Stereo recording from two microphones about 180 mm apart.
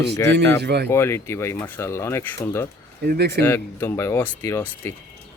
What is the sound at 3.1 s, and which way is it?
Speech, 65° right (ahead or behind).